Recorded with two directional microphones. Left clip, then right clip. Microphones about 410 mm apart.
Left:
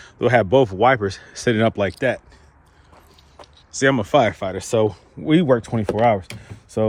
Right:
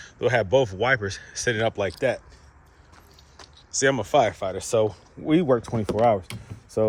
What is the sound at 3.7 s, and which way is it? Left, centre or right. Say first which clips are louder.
Speech: left 4 dB; centre.